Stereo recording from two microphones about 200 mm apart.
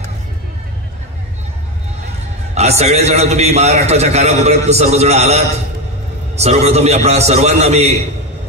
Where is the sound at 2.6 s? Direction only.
35° right (ahead or behind).